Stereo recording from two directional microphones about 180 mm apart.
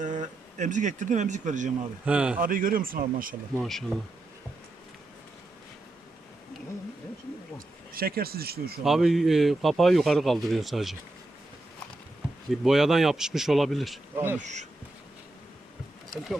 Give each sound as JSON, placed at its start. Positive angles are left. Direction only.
{"t": 0.0, "sound": "speech", "side_deg": -45}
{"t": 2.0, "sound": "a man's voice", "side_deg": -5}
{"t": 2.4, "sound": "speech", "side_deg": -50}
{"t": 3.5, "sound": "a man's voice", "side_deg": 0}
{"t": 7.9, "sound": "speech", "side_deg": -55}
{"t": 8.8, "sound": "a man's voice", "side_deg": 0}
{"t": 12.6, "sound": "a man's voice", "side_deg": 0}
{"t": 14.4, "sound": "speech", "side_deg": -40}